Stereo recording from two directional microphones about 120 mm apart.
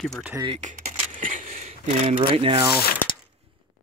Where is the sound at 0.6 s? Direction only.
85° right; by 2.2 s 70° right (ahead or behind).